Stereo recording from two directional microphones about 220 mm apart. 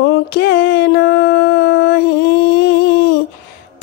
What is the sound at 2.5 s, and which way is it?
Humming, 45° left (ahead or behind).